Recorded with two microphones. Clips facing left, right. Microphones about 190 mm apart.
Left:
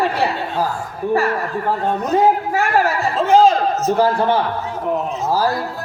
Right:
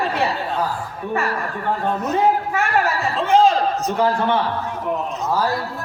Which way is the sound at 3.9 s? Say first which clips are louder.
Left 5 dB; 35° left (ahead or behind).